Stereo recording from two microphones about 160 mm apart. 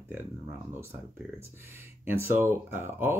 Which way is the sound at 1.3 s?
15° right (ahead or behind).